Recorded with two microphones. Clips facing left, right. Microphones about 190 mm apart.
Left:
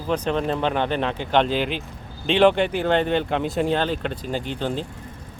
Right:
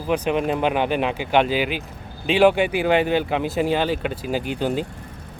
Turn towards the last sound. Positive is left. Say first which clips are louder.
# right 3 dB
turn(degrees=-10)  # may be behind; listen again after turning